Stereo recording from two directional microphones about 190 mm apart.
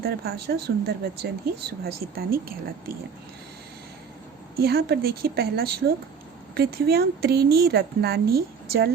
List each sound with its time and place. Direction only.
0.0 s speech: 55° right (ahead or behind)
4.6 s speech: 55° right (ahead or behind)